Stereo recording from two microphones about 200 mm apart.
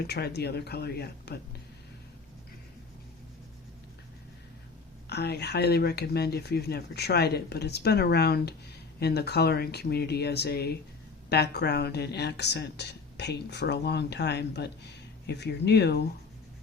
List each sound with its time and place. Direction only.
0.0 s speech: 50° left (ahead or behind)
5.0 s speech: 55° left (ahead or behind)